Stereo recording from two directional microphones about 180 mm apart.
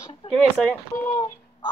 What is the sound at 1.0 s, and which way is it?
Speech, 20° left (ahead or behind).